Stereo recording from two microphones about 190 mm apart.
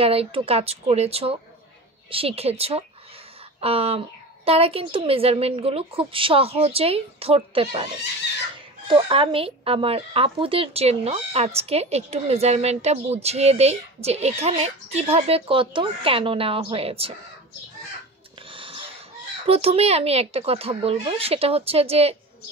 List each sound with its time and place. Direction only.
0.0 s a woman's voice: 30° right (ahead or behind)
18.5 s a sound: 30° right (ahead or behind)
19.4 s a woman's voice: 30° right (ahead or behind)